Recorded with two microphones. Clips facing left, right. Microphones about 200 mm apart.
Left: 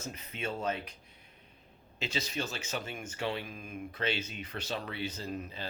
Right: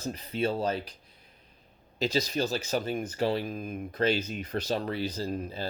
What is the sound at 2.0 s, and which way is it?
Speech, 35° right (ahead or behind).